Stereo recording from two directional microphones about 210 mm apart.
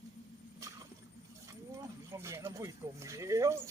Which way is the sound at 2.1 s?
15° right (ahead or behind).